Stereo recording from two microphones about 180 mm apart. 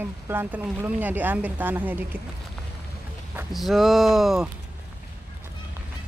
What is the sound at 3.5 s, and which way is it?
Speech, centre (ahead or behind).